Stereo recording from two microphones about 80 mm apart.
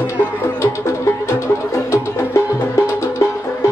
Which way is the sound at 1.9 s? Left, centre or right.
Left.